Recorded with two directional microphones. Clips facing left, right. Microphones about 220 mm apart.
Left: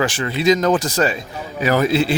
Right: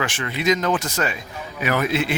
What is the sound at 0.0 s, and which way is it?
A man's voice, 35° left (ahead or behind).